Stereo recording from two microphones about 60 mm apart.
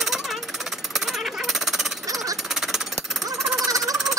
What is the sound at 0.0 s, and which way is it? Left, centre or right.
Jackhammer, centre.